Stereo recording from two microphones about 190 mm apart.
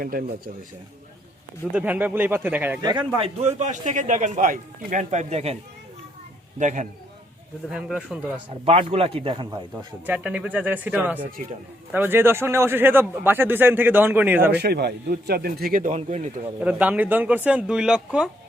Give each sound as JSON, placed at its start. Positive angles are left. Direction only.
{"t": 0.0, "sound": "a man's voice", "side_deg": -50}
{"t": 1.7, "sound": "a man's voice", "side_deg": -10}
{"t": 3.2, "sound": "a man's voice", "side_deg": -35}
{"t": 6.6, "sound": "a man's voice", "side_deg": -40}
{"t": 7.7, "sound": "speech", "side_deg": -5}
{"t": 8.6, "sound": "a man's voice", "side_deg": -30}
{"t": 10.1, "sound": "a man's voice", "side_deg": -5}
{"t": 14.5, "sound": "a man's voice", "side_deg": -60}
{"t": 16.6, "sound": "a man's voice", "side_deg": -5}